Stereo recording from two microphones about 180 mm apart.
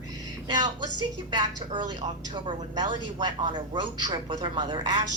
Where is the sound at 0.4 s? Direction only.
25° right (ahead or behind).